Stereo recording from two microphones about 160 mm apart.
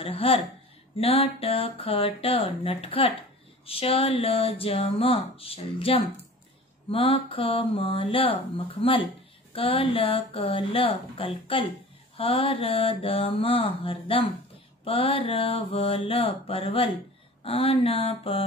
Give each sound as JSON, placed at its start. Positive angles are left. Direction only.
{"t": 0.0, "sound": "speech", "side_deg": 35}